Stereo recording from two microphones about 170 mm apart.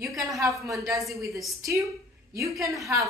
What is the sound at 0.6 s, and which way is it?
Speech, 20° right (ahead or behind).